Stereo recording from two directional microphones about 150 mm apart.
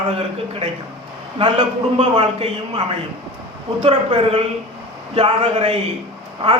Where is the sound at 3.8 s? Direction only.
40° right (ahead or behind).